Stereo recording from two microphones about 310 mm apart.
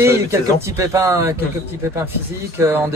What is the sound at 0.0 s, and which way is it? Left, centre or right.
Speech, centre.